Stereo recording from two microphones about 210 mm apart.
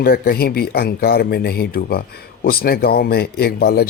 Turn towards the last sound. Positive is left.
turn(degrees=50)  # may be behind; listen again after turning